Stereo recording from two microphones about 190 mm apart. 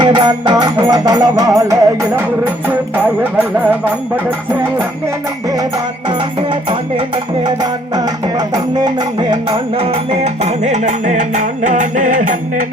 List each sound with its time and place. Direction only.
0.0 s music: 25° right (ahead or behind)
5.5 s music: 20° right (ahead or behind); by 12.6 s 45° right (ahead or behind)